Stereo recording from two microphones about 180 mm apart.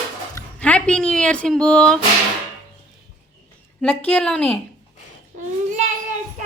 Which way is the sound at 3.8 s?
10° left (ahead or behind).